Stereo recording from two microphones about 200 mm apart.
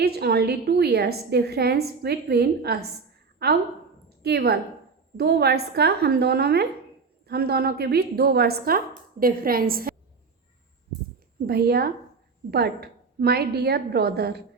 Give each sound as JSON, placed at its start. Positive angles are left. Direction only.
{"t": 0.0, "sound": "a woman's voice", "side_deg": -55}
{"t": 11.4, "sound": "a woman's voice", "side_deg": -50}